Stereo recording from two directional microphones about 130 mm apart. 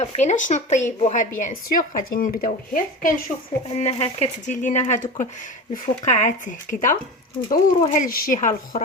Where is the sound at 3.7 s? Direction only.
55° left (ahead or behind).